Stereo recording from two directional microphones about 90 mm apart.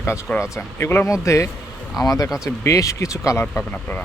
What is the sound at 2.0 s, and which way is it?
Speech, 45° left (ahead or behind).